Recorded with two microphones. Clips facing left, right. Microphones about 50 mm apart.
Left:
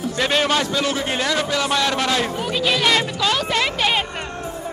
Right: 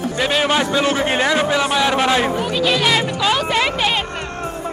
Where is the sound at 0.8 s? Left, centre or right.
Right.